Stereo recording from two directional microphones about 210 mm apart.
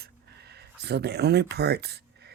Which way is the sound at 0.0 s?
50° right (ahead or behind).